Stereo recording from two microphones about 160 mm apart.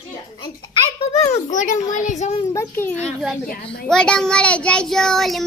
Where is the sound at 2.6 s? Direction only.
15° left (ahead or behind).